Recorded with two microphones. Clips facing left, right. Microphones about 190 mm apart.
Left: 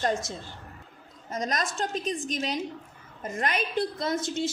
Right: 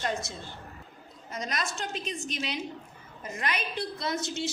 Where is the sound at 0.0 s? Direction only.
45° left (ahead or behind).